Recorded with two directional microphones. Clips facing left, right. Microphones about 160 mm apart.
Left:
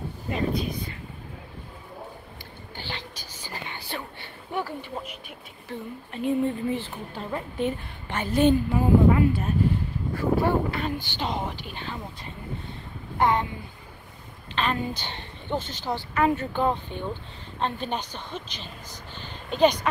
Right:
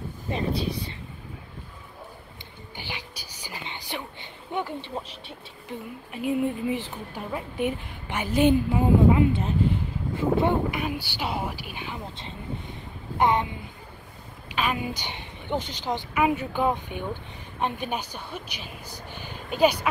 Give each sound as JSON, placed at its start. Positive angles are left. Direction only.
{"t": 0.3, "sound": "speech", "side_deg": -30}
{"t": 2.7, "sound": "whispering", "side_deg": -10}
{"t": 5.7, "sound": "a woman's voice", "side_deg": -15}
{"t": 13.2, "sound": "a child's voice", "side_deg": -20}
{"t": 14.5, "sound": "a woman's voice", "side_deg": -10}